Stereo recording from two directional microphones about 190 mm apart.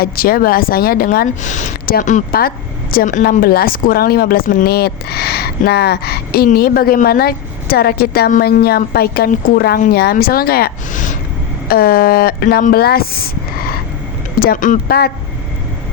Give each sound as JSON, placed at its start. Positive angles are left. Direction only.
{"t": 0.0, "sound": "a woman's voice", "side_deg": 50}
{"t": 11.7, "sound": "a woman's voice", "side_deg": 55}